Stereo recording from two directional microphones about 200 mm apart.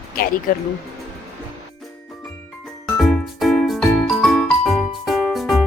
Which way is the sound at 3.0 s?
Centre (ahead or behind).